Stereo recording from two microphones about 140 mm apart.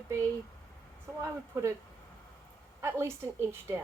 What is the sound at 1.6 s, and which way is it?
Speech, 20° right (ahead or behind).